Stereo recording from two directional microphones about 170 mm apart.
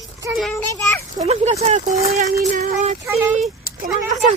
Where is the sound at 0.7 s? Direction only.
15° left (ahead or behind).